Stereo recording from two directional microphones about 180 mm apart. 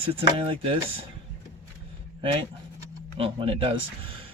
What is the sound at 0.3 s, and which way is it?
Speech, 30° right (ahead or behind).